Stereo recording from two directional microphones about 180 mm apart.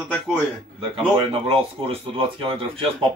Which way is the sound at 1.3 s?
30° right (ahead or behind).